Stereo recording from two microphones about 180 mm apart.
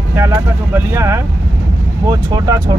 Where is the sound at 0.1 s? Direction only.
15° right (ahead or behind).